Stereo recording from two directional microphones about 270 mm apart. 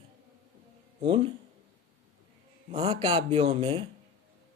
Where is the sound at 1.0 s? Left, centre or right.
Centre.